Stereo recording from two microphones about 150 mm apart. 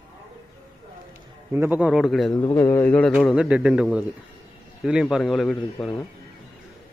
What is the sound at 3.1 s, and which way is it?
A man's voice, 5° right (ahead or behind).